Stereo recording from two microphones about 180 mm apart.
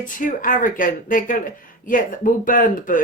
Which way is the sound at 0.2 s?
50° left (ahead or behind).